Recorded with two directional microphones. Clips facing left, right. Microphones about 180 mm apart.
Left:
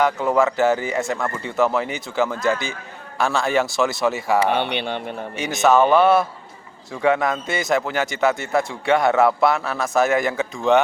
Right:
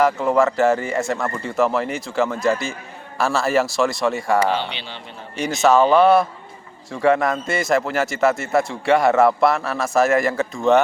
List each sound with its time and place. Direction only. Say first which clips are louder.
0.0 s a man's voice: right 1 dB; centre (ahead or behind)
4.4 s speech: left 2 dB; 60° left (ahead or behind)
5.4 s a man's voice: right 1 dB; centre (ahead or behind)